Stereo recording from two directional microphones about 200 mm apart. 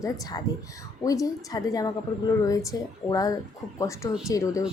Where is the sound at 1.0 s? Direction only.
15° left (ahead or behind).